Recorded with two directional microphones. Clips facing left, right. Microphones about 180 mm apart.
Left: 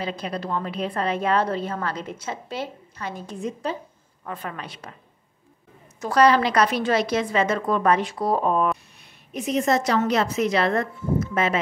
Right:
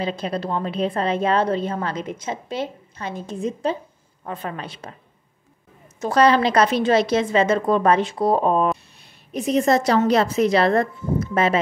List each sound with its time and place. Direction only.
0.0 s a woman's voice: 25° right (ahead or behind)
5.9 s a woman's voice: 25° right (ahead or behind)